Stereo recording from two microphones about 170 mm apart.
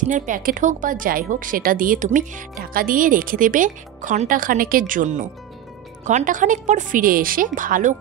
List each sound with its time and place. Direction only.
0.0 s speech: 50° right (ahead or behind)